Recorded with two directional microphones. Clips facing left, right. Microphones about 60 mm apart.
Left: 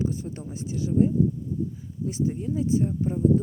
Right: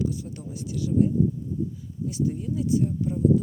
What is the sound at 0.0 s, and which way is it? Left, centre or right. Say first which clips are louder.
Speech: even; left.